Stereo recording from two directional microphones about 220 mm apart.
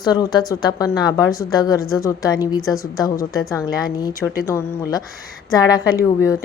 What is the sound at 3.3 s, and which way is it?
Speech, 15° left (ahead or behind).